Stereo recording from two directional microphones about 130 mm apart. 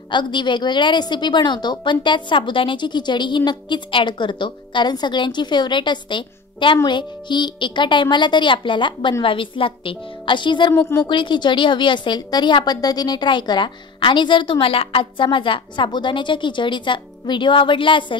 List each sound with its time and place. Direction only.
0.1 s a woman's voice: 35° left (ahead or behind)
10.7 s a woman's voice: 20° left (ahead or behind)
11.1 s a woman's voice: 40° left (ahead or behind)